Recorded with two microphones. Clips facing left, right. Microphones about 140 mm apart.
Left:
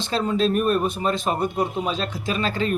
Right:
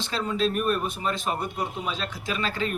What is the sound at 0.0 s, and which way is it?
A man's voice, 30° left (ahead or behind).